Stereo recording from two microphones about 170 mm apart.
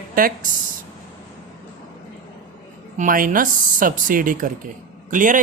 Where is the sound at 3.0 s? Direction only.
50° right (ahead or behind).